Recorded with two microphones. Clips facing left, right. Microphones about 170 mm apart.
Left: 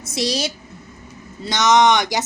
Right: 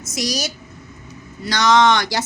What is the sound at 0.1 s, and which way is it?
A woman's voice, 30° left (ahead or behind).